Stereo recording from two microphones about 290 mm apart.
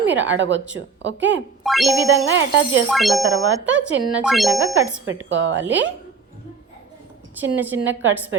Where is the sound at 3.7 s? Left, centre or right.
Right.